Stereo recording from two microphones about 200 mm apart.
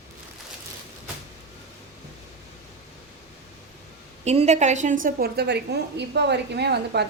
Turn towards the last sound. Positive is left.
turn(degrees=-55)  # may be behind; listen again after turning